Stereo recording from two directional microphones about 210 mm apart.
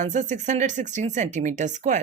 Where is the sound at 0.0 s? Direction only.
35° right (ahead or behind).